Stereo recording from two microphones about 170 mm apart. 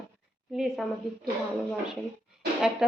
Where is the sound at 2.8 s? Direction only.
Centre (ahead or behind).